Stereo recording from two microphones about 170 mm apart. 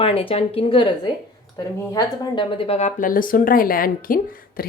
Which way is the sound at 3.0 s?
55° left (ahead or behind).